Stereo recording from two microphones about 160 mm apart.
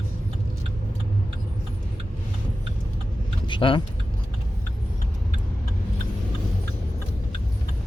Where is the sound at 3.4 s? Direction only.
30° left (ahead or behind).